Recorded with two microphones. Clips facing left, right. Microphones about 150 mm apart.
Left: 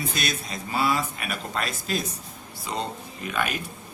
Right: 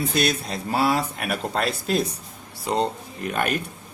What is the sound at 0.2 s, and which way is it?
Speech, 60° right (ahead or behind).